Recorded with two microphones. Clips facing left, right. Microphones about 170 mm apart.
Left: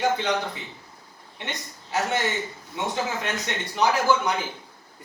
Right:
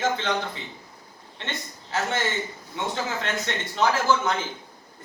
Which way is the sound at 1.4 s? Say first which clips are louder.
Even; 15° left (ahead or behind).